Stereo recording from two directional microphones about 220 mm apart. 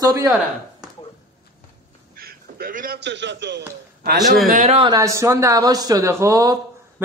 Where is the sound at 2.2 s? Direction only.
45° right (ahead or behind).